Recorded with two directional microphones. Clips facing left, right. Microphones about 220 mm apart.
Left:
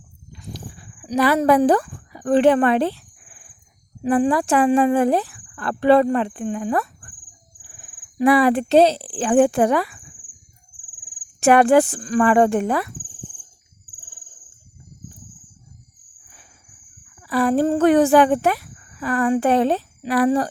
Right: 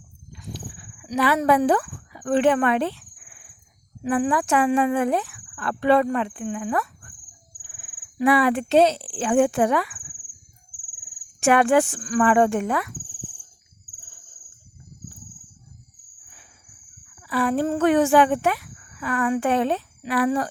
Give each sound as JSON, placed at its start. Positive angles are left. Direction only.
{"t": 0.3, "sound": "a sound", "side_deg": 35}
{"t": 4.1, "sound": "speech", "side_deg": 35}
{"t": 11.3, "sound": "speech", "side_deg": 35}
{"t": 17.2, "sound": "speech", "side_deg": 40}